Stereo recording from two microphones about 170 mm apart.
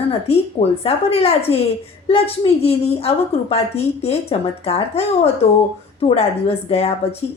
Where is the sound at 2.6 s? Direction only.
35° left (ahead or behind).